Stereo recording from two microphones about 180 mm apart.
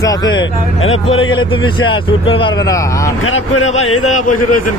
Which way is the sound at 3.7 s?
40° left (ahead or behind).